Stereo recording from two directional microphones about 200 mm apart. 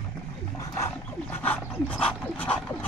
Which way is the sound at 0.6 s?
15° left (ahead or behind).